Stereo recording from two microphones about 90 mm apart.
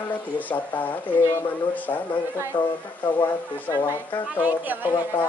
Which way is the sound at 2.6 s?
55° left (ahead or behind).